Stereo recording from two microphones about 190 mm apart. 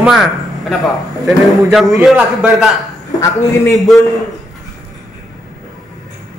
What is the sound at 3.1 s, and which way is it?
Speech, 15° left (ahead or behind).